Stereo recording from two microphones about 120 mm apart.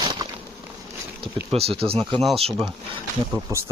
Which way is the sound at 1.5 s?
55° right (ahead or behind).